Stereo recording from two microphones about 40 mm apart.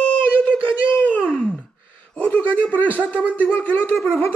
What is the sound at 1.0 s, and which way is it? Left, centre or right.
Wail, left.